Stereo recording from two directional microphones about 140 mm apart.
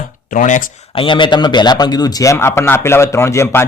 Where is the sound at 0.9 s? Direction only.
35° left (ahead or behind).